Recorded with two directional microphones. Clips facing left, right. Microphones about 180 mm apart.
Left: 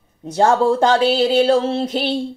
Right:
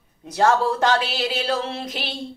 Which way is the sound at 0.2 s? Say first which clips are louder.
Left 4 dB; 30° left (ahead or behind).